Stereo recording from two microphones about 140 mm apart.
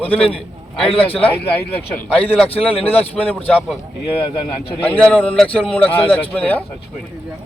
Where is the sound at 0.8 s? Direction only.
40° left (ahead or behind).